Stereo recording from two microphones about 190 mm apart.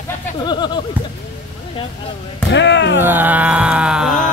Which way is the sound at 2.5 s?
70° left (ahead or behind).